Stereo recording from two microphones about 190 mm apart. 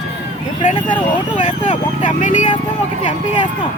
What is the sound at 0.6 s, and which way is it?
Speech, 25° left (ahead or behind).